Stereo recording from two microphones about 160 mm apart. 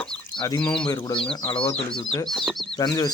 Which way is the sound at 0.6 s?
5° left (ahead or behind).